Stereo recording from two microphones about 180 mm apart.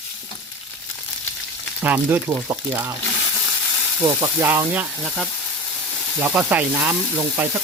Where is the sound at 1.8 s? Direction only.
10° right (ahead or behind).